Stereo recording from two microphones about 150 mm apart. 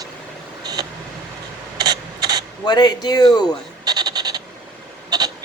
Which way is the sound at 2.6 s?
30° left (ahead or behind).